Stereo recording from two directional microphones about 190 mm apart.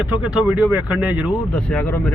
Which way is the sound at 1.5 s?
5° left (ahead or behind).